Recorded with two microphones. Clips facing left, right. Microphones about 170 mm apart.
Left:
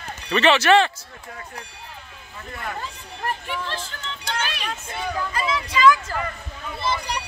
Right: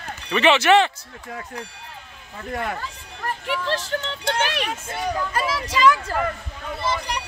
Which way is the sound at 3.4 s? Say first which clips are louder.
Right 5 dB; 80° right.